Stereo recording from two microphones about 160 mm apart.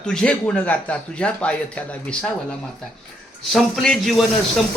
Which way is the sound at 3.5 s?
Centre (ahead or behind).